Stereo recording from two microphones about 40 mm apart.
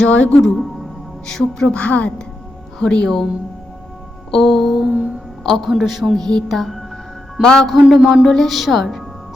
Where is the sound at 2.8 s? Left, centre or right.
Left.